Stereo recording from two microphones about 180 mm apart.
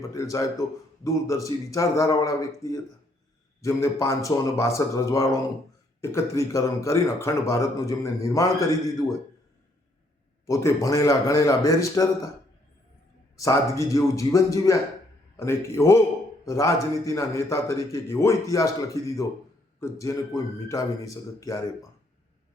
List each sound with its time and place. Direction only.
0.0 s speech: 20° left (ahead or behind)
10.4 s a man's voice: 15° left (ahead or behind)
13.3 s speech: 15° left (ahead or behind)
19.8 s speech: 15° left (ahead or behind)